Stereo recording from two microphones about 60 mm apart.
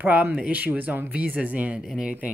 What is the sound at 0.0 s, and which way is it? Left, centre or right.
Speech, right.